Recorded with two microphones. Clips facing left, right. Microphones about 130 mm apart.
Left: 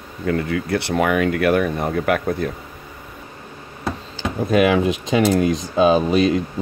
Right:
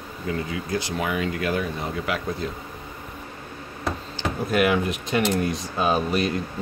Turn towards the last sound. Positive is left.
turn(degrees=90)